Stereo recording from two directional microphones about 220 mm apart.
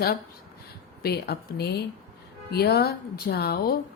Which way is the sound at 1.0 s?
45° left (ahead or behind).